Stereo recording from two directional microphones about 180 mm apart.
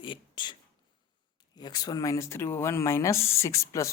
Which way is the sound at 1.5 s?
25° left (ahead or behind).